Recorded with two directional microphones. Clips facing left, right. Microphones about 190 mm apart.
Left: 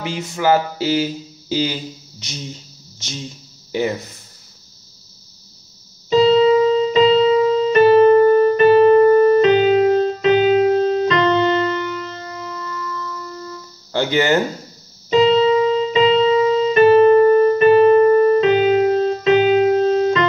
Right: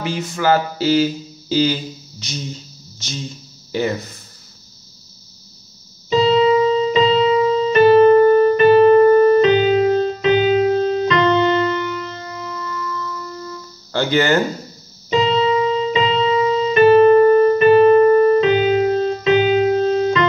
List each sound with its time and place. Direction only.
0.0 s speech: 20° left (ahead or behind)
6.0 s keyboard: 35° left (ahead or behind)
12.3 s music: 40° left (ahead or behind)
13.9 s speech: 20° left (ahead or behind)
15.0 s keyboard: 35° left (ahead or behind)